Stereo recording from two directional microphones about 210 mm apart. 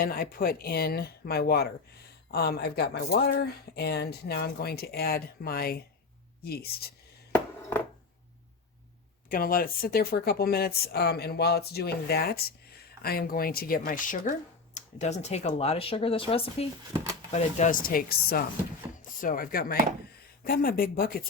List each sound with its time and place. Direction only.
0.0 s speech: 45° left (ahead or behind)
9.3 s speech: 45° left (ahead or behind); by 16.6 s 25° left (ahead or behind)
17.3 s speech: 35° left (ahead or behind)